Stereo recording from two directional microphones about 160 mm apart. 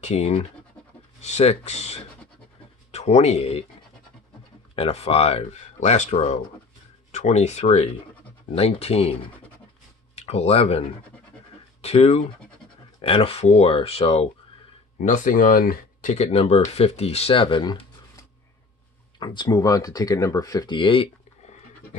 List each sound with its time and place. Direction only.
0.0 s speech: 45° left (ahead or behind)
4.7 s speech: 40° left (ahead or behind)
15.0 s speech: 50° left (ahead or behind)
16.1 s speech: 40° left (ahead or behind)